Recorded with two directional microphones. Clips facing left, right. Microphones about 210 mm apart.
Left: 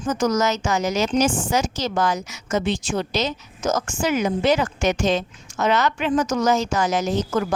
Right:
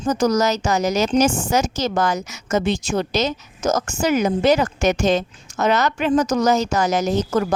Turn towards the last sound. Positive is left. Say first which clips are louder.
# right 3 dB
turn(degrees=-40)  # may be behind; listen again after turning